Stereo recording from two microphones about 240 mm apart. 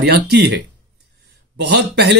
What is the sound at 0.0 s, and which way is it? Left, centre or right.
Speech, right.